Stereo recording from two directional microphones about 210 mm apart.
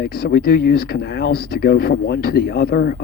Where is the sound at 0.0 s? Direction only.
45° left (ahead or behind).